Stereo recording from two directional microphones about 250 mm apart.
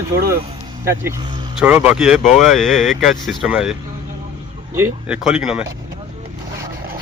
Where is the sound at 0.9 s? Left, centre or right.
Centre.